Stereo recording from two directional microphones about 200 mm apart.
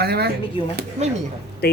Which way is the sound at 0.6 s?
25° left (ahead or behind).